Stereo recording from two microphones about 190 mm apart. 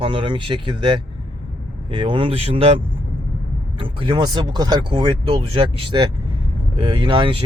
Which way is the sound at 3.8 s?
25° right (ahead or behind).